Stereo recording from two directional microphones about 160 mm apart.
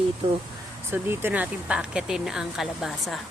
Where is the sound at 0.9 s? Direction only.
15° right (ahead or behind).